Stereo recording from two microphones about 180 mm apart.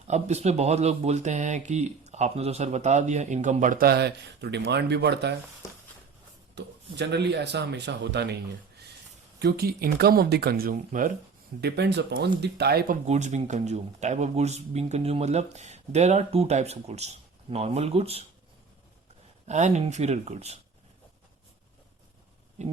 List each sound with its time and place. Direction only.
0.1 s speech: 35° right (ahead or behind); by 5.4 s 70° right (ahead or behind)
6.6 s speech: 70° right (ahead or behind)
9.4 s speech: 60° right (ahead or behind)
11.6 s speech: 65° right (ahead or behind)
13.1 s speech: 40° right (ahead or behind)
19.5 s speech: 40° right (ahead or behind)
22.6 s speech: 40° right (ahead or behind)